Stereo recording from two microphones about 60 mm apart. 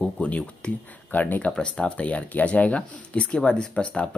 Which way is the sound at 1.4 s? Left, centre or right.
Centre.